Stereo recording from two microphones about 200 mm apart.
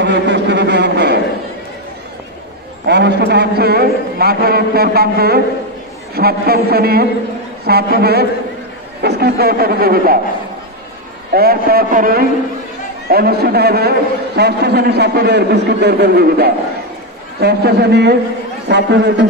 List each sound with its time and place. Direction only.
0.0 s a sound: 60° right (ahead or behind)
2.9 s a man's voice: 55° right (ahead or behind)
11.3 s a man's voice: 50° right (ahead or behind)